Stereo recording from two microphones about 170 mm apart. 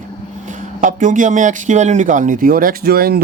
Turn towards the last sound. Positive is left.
turn(degrees=-65)  # may be behind; listen again after turning